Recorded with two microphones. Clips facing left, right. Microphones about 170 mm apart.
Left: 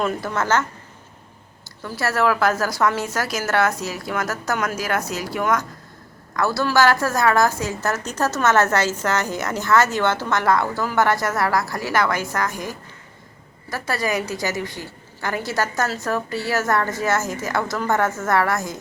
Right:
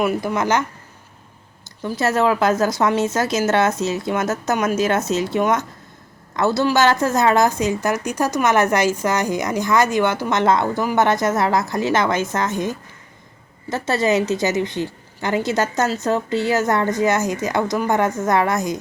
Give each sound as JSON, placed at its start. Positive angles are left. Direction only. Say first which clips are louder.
{"t": 0.0, "sound": "a woman's voice", "louder": "right 3 dB", "side_deg": -10}
{"t": 1.8, "sound": "a woman's voice", "louder": "right 3 dB", "side_deg": -20}